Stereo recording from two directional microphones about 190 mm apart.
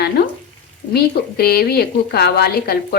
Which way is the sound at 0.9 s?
55° left (ahead or behind).